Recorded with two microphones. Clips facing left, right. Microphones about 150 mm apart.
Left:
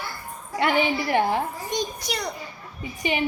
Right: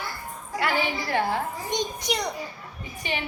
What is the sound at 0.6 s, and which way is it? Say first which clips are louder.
Speech: left 4 dB; 20° left (ahead or behind).